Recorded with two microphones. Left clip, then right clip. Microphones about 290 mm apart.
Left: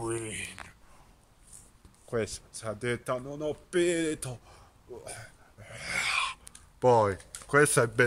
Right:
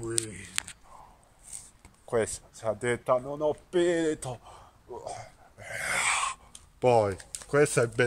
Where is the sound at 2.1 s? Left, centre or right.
Right.